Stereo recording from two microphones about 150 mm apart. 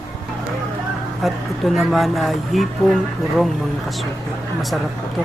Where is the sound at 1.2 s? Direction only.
Centre (ahead or behind).